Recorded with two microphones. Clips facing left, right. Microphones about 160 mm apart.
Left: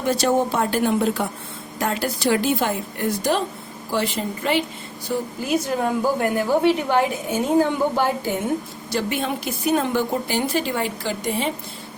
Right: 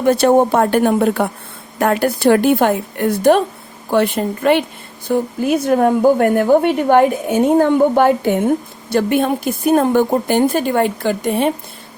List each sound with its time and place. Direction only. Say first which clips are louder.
0.0 s a woman's voice: right 8 dB; 55° right (ahead or behind)